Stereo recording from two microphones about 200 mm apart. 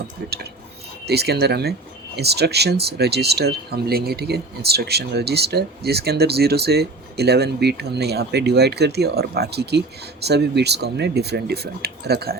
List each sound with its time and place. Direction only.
0.2 s speech: 50° right (ahead or behind)